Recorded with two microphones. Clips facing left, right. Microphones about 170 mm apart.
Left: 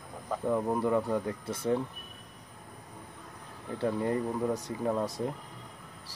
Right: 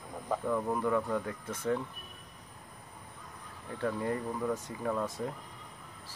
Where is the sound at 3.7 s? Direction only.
30° left (ahead or behind).